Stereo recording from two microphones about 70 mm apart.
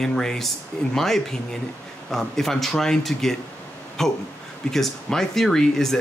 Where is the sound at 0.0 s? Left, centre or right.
Centre.